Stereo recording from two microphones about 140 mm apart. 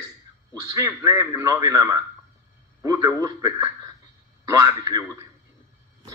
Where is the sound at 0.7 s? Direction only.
25° right (ahead or behind).